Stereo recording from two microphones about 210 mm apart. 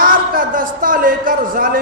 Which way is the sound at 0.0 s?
40° right (ahead or behind).